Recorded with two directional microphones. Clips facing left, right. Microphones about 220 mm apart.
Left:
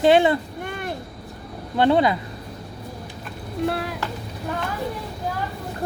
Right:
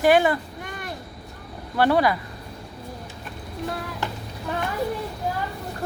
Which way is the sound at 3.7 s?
70° left (ahead or behind).